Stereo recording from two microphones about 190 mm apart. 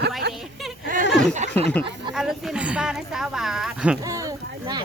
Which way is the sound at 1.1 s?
5° left (ahead or behind).